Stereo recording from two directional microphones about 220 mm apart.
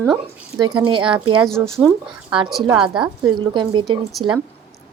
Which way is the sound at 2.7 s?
5° right (ahead or behind).